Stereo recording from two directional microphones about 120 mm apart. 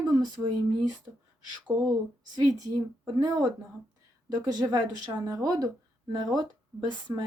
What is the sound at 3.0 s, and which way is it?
Speech, 30° right (ahead or behind).